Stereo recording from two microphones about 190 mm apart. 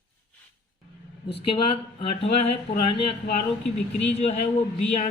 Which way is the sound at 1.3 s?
30° left (ahead or behind).